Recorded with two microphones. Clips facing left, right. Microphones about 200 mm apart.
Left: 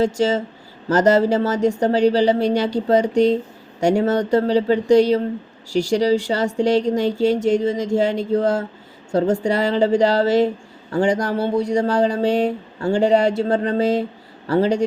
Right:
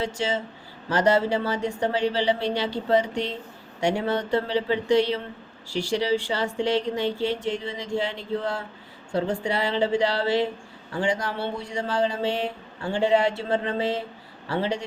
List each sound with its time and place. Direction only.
0.0 s speech: 40° left (ahead or behind)